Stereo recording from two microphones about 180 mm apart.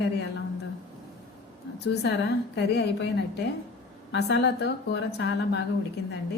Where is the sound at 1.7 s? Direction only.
70° left (ahead or behind).